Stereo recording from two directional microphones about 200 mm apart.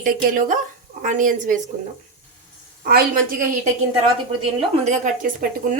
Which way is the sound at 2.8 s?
50° right (ahead or behind).